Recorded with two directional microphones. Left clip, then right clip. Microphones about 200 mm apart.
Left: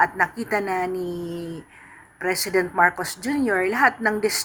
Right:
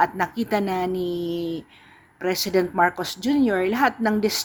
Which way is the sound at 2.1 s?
30° right (ahead or behind).